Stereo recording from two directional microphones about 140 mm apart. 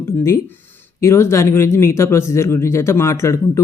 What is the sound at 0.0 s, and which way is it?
Speech, 20° left (ahead or behind).